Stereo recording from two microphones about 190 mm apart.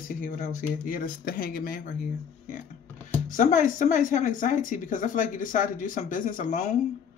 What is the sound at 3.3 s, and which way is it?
Speech, 40° left (ahead or behind).